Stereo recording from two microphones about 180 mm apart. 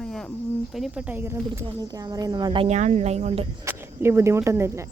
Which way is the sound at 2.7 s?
40° right (ahead or behind).